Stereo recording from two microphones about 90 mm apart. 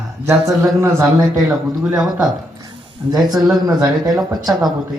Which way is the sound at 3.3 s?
45° right (ahead or behind).